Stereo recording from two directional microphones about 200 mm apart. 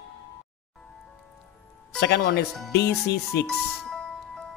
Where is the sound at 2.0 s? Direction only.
55° left (ahead or behind).